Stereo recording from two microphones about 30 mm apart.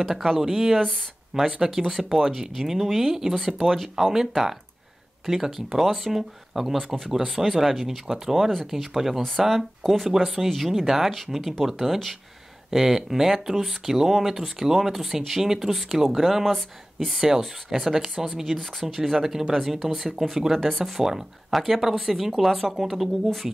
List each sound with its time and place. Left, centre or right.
0.0 s speech: centre
10.1 s speech: centre
16.4 s speech: centre
17.6 s speech: centre
18.9 s speech: centre